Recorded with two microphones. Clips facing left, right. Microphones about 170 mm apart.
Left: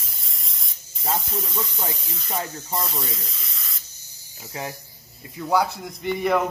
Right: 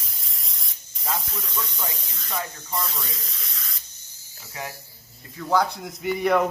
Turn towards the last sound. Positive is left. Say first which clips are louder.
# right 1 dB
turn(degrees=0)  # may be behind; listen again after turning